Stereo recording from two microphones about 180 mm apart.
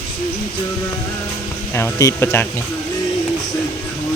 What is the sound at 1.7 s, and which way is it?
Speech, 15° left (ahead or behind).